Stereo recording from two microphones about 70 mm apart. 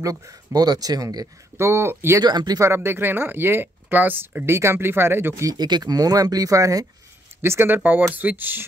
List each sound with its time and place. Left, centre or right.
0.0 s speech: right
2.2 s speech: right
2.6 s speech: right
4.5 s speech: right
5.4 s speech: right
7.4 s speech: right